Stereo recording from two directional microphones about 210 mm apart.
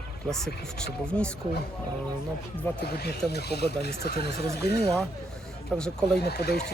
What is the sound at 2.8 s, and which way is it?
Speech, 50° left (ahead or behind).